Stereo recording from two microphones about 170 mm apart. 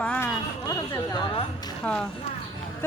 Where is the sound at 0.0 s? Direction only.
10° left (ahead or behind).